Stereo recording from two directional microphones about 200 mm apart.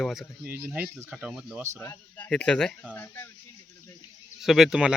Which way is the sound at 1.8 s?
10° left (ahead or behind).